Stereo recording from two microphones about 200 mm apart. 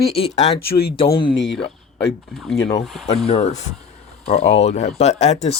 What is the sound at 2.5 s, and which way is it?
Speech, 15° left (ahead or behind).